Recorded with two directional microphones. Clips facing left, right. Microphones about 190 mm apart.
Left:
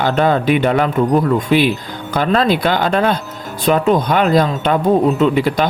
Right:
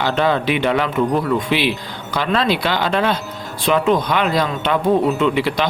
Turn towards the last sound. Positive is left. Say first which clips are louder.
# left 3 dB
turn(degrees=45)  # may be behind; listen again after turning